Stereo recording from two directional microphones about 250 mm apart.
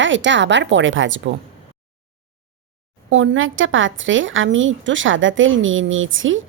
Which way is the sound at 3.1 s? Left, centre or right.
Right.